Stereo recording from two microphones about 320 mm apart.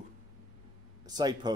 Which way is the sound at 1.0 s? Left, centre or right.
Centre.